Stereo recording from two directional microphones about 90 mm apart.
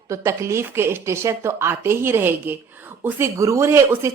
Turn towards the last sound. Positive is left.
turn(degrees=-30)  # may be behind; listen again after turning